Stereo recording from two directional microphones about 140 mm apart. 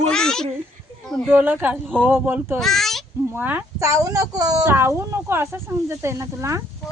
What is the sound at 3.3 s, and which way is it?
Speech, 15° right (ahead or behind).